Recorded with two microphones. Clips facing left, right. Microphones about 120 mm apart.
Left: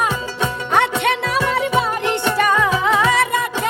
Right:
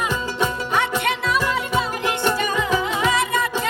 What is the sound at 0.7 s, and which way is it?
Music, 65° left (ahead or behind).